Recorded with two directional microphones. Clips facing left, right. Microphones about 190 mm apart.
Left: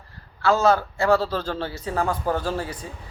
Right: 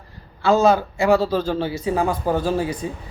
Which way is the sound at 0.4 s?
15° right (ahead or behind).